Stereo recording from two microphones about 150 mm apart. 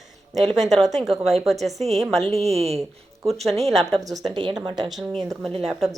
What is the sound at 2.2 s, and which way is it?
Speech, 45° right (ahead or behind).